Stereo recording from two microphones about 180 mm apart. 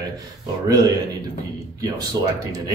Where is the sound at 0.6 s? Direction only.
20° right (ahead or behind).